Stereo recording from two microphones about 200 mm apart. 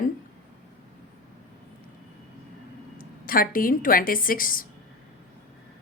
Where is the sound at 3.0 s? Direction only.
45° left (ahead or behind).